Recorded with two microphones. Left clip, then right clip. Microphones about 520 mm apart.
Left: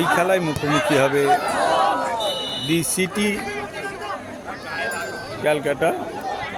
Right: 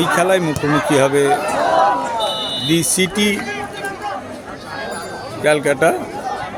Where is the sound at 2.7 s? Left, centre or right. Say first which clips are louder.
Right 5 dB; left.